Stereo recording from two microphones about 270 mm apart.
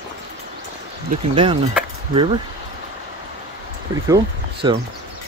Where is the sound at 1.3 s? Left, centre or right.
Centre.